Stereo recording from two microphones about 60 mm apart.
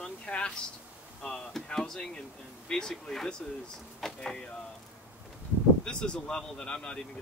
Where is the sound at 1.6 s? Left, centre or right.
Centre.